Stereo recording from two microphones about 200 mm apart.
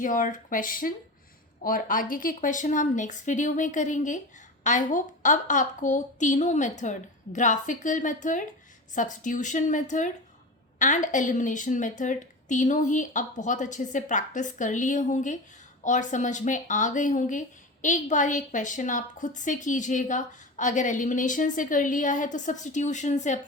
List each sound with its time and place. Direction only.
0.0 s a woman's voice: 40° left (ahead or behind)